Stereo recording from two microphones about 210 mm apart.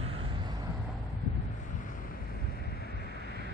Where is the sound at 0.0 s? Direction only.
25° right (ahead or behind).